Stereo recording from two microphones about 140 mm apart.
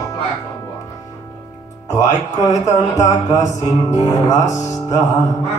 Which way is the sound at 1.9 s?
25° left (ahead or behind).